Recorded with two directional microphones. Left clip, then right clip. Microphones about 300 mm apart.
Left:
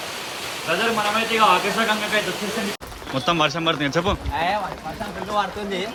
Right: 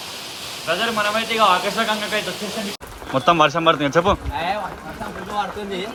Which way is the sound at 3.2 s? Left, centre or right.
Centre.